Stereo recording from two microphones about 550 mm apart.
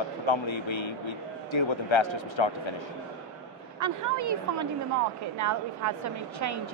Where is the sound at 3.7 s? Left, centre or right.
Right.